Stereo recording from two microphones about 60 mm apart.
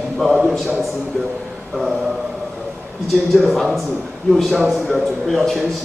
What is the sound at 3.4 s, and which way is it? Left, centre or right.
A man's voice, centre.